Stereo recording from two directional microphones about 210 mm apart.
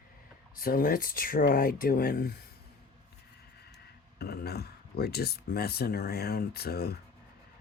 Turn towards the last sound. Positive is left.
turn(degrees=50)  # may be behind; listen again after turning